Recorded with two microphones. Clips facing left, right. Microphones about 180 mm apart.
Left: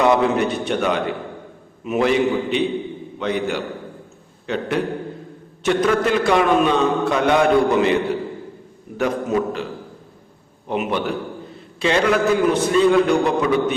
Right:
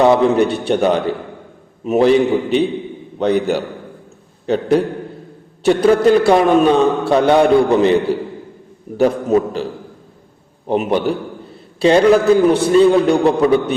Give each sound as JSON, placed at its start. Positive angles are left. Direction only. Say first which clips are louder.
{"t": 0.0, "sound": "a man's voice", "louder": "right 5 dB", "side_deg": -30}
{"t": 10.7, "sound": "a man's voice", "louder": "right 6 dB", "side_deg": -35}